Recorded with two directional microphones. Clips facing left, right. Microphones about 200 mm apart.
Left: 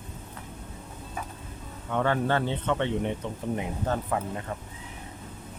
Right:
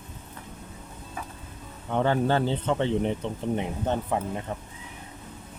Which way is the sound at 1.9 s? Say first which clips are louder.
Right 2 dB; 30° right (ahead or behind).